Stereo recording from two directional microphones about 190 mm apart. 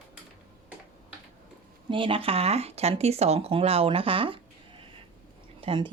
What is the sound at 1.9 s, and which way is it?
A woman's voice, 25° right (ahead or behind).